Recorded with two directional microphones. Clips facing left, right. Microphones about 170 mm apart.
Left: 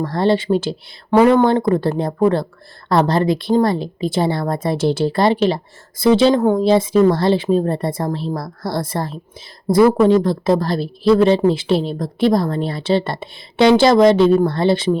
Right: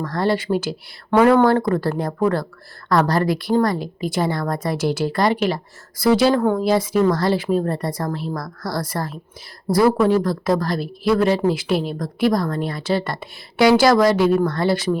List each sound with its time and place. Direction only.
0.0 s a woman's voice: 25° left (ahead or behind)
1.1 s speech: centre (ahead or behind)
1.4 s a woman's voice: 20° left (ahead or behind)
10.2 s a woman's voice: 25° left (ahead or behind)